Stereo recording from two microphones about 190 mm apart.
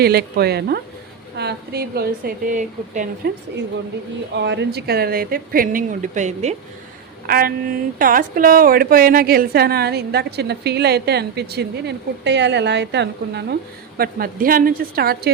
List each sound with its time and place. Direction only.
0.0 s a woman's voice: 55° right (ahead or behind); by 3.1 s 40° right (ahead or behind)
4.4 s speech: 65° right (ahead or behind); by 6.6 s 40° right (ahead or behind)
7.3 s a woman's voice: 50° right (ahead or behind)
14.0 s speech: 50° right (ahead or behind)